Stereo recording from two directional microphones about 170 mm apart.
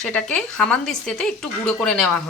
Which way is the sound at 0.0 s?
5° left (ahead or behind).